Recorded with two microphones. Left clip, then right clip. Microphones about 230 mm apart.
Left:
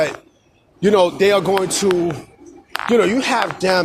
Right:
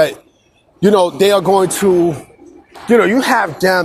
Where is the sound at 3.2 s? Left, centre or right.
Right.